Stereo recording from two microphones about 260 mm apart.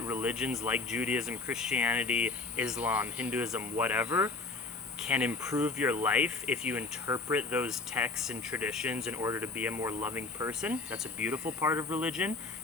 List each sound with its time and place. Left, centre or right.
0.0 s speech: centre